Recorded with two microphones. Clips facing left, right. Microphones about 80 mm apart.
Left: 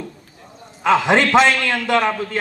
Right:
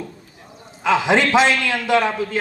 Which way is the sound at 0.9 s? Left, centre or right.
Left.